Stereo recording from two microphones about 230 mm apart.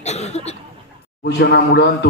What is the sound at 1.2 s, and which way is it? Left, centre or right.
Speech, left.